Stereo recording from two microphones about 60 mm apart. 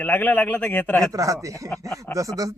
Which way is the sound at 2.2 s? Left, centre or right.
Right.